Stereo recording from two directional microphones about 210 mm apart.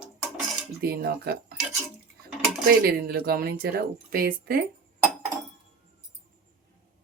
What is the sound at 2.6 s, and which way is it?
Speech, 50° right (ahead or behind).